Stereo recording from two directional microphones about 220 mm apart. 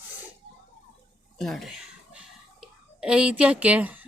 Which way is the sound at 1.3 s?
Centre (ahead or behind).